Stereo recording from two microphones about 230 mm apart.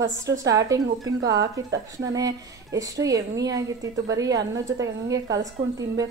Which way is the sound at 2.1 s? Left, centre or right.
Centre.